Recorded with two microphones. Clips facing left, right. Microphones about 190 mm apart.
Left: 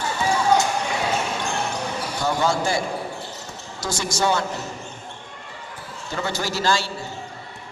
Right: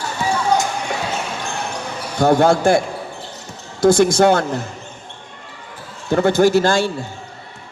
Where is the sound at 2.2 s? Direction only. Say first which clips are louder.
Right 10 dB; 55° right (ahead or behind).